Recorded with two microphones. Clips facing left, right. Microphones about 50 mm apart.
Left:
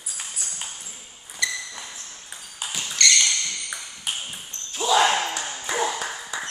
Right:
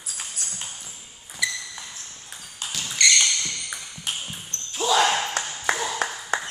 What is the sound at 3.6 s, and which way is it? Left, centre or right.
Basketball bounce, centre.